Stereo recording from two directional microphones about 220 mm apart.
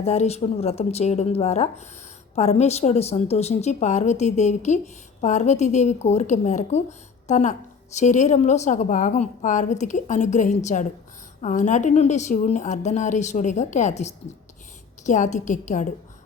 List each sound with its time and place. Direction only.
0.0 s a woman's voice: 30° left (ahead or behind)